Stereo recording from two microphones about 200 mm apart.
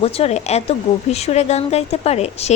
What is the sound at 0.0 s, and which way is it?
A woman's voice, 30° left (ahead or behind).